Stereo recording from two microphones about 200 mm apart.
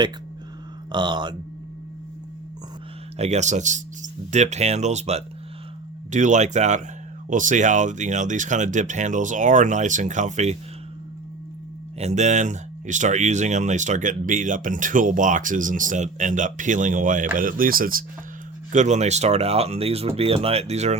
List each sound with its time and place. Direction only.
0.9 s speech: 25° right (ahead or behind)
3.2 s speech: 35° right (ahead or behind)
11.9 s speech: 35° right (ahead or behind)